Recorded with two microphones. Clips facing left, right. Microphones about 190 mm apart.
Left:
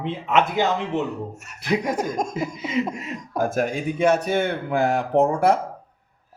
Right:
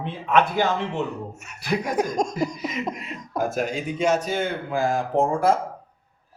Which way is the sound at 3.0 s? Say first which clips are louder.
Left 2 dB; 50° left (ahead or behind).